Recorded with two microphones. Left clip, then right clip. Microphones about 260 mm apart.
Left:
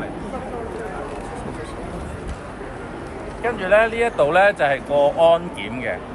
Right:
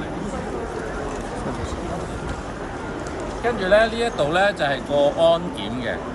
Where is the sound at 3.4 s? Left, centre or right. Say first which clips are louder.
Left 1 dB; centre.